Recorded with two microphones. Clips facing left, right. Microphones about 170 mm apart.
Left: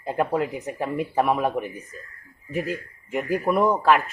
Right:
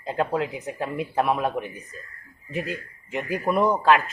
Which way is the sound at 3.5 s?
5° left (ahead or behind).